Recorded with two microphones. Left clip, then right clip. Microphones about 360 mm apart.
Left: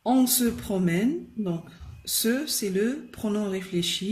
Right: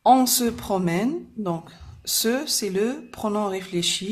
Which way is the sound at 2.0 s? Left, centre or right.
Centre.